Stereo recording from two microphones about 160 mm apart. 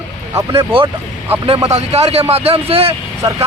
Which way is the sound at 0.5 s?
35° right (ahead or behind).